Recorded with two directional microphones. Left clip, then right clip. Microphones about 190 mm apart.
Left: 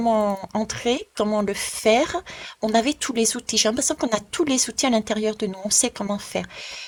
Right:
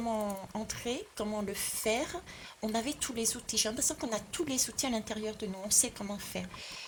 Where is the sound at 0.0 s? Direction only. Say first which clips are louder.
Left 14 dB; 45° left (ahead or behind).